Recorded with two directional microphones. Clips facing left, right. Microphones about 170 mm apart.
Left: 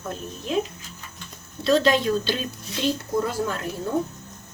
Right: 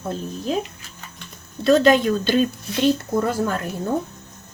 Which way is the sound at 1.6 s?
50° right (ahead or behind).